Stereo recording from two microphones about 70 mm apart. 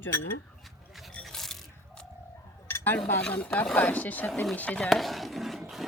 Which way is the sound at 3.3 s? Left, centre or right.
Left.